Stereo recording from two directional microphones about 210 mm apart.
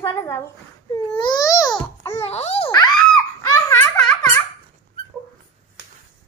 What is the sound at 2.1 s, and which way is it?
Babbling, 30° left (ahead or behind).